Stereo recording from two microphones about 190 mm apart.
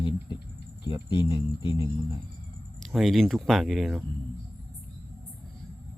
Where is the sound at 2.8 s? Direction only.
Centre (ahead or behind).